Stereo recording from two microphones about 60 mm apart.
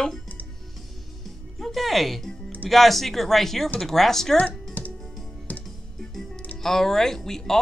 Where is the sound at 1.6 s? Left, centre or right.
Centre.